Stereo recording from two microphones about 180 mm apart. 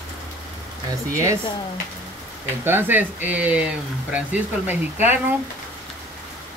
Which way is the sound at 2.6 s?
10° right (ahead or behind).